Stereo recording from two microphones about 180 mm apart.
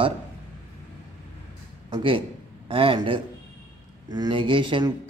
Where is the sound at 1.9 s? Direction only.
25° right (ahead or behind).